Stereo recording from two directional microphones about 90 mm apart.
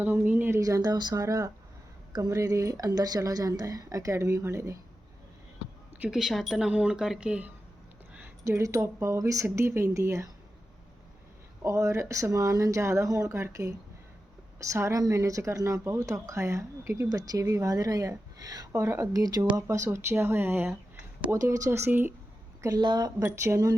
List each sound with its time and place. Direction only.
0.0 s speech: 15° right (ahead or behind)
0.6 s speech: 45° right (ahead or behind)
6.1 s speech: 5° right (ahead or behind)
8.4 s speech: 35° right (ahead or behind)
11.6 s a woman's voice: 35° right (ahead or behind)
18.7 s speech: 30° right (ahead or behind)
21.2 s speech: 35° right (ahead or behind)
22.8 s a woman's voice: 50° right (ahead or behind)
23.2 s speech: 30° right (ahead or behind)